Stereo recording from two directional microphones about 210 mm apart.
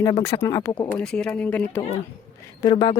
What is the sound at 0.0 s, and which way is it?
Speech, 15° left (ahead or behind).